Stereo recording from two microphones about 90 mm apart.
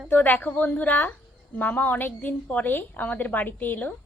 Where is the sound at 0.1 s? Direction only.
20° left (ahead or behind).